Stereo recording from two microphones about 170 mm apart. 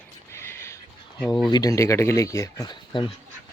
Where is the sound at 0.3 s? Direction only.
15° left (ahead or behind).